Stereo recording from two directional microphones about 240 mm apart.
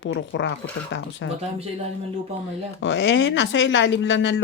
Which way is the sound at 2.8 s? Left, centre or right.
Left.